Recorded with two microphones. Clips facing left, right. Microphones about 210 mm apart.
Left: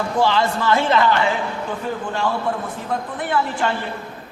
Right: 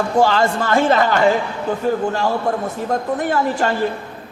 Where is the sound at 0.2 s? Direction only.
45° right (ahead or behind).